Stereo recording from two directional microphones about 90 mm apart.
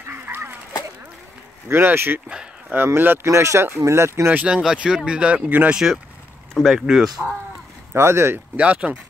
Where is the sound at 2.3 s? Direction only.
10° right (ahead or behind).